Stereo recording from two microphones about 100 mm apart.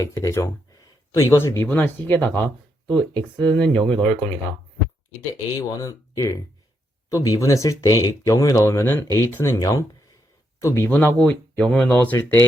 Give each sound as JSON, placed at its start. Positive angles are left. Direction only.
{"t": 0.0, "sound": "speech", "side_deg": 30}
{"t": 0.7, "sound": "a sound", "side_deg": 35}
{"t": 1.6, "sound": "speech", "side_deg": 20}
{"t": 5.5, "sound": "speech", "side_deg": 35}
{"t": 11.2, "sound": "speech", "side_deg": 10}